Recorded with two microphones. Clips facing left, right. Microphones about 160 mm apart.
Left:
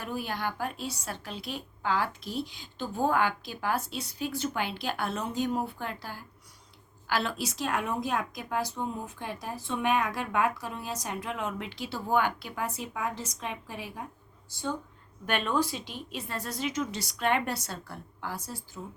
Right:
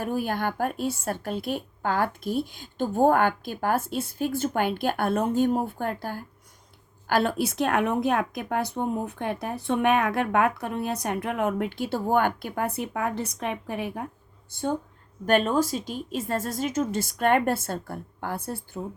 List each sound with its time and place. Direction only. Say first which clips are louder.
0.0 s a woman's voice: right 6 dB; 50° right (ahead or behind)
15.3 s a woman's voice: right 7 dB; 40° right (ahead or behind); by 18.8 s 55° right (ahead or behind)